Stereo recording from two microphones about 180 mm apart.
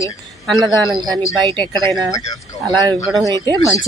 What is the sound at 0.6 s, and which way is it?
A man's voice, 25° right (ahead or behind).